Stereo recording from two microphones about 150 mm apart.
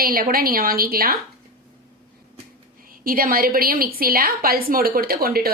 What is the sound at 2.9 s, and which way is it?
Speech, 70° right (ahead or behind).